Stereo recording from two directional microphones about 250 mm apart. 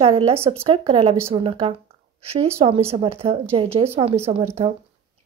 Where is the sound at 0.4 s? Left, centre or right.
Centre.